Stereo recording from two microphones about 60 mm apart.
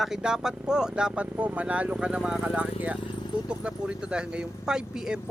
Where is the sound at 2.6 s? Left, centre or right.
Right.